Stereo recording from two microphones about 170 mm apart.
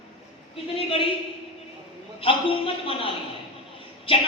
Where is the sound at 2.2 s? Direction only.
30° left (ahead or behind).